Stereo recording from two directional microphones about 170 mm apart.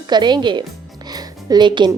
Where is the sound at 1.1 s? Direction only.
25° right (ahead or behind).